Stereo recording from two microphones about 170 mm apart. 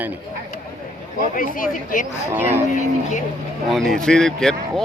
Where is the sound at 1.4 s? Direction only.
55° left (ahead or behind).